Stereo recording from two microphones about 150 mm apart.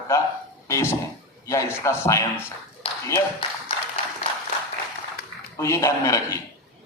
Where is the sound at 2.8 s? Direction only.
35° left (ahead or behind).